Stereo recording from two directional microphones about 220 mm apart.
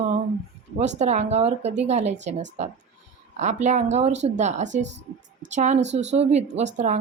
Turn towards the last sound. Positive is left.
turn(degrees=-30)  # may be behind; listen again after turning